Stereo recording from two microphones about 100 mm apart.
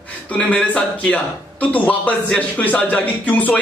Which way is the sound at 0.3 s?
15° left (ahead or behind).